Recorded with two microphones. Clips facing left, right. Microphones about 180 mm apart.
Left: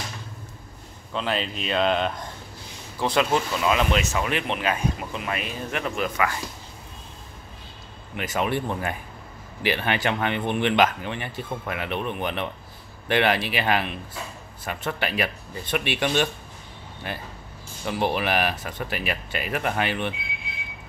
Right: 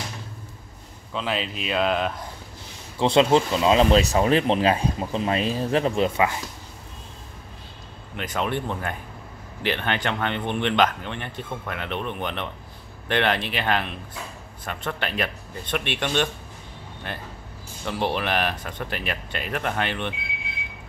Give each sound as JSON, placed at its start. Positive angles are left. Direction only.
{"t": 1.1, "sound": "speech", "side_deg": 0}
{"t": 3.0, "sound": "speech", "side_deg": -25}
{"t": 8.2, "sound": "speech", "side_deg": 5}